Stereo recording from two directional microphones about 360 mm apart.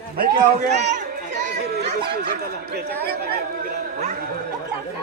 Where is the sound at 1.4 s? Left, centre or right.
Right.